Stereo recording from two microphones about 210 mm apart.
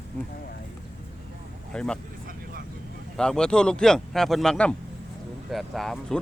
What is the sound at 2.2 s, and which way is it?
Vehicle, 45° right (ahead or behind).